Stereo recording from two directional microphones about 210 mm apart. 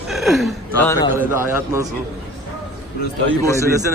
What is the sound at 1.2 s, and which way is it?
Speech, 10° right (ahead or behind).